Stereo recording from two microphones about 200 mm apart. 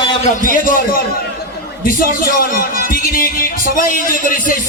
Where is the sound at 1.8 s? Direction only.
45° left (ahead or behind).